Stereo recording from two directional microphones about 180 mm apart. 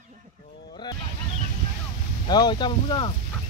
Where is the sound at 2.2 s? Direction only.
25° left (ahead or behind).